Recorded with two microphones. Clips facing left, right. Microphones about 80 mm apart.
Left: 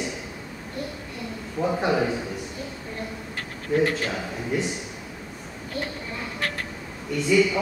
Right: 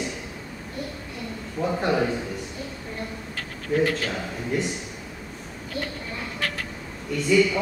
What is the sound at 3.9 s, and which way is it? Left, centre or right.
Speech, centre.